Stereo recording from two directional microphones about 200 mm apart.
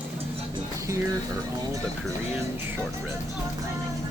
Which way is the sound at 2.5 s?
10° right (ahead or behind).